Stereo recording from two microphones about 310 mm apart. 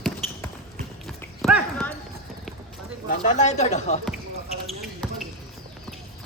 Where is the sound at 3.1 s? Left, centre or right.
Left.